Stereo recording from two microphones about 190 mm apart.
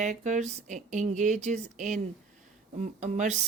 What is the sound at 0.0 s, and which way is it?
Speech, 40° right (ahead or behind).